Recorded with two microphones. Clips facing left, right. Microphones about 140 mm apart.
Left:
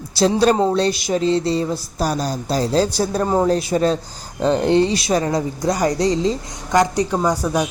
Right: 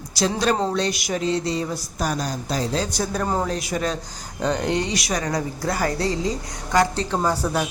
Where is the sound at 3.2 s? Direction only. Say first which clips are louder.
Left 6 dB; 20° left (ahead or behind).